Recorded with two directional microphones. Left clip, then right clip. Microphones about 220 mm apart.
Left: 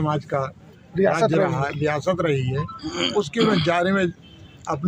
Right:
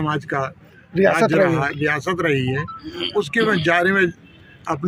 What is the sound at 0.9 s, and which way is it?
Speech, 50° right (ahead or behind).